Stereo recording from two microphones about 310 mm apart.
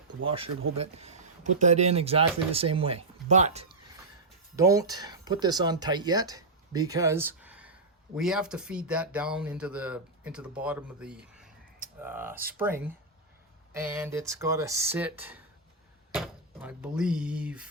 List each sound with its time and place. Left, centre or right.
0.3 s speech: centre